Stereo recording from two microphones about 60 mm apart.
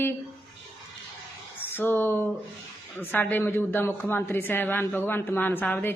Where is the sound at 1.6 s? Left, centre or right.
Left.